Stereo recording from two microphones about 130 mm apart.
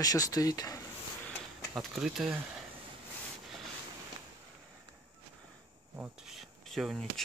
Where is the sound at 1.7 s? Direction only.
Centre (ahead or behind).